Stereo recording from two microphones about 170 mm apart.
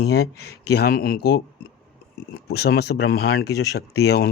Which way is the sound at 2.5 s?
70° left (ahead or behind).